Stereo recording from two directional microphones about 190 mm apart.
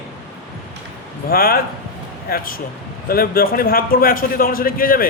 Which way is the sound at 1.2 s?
50° left (ahead or behind).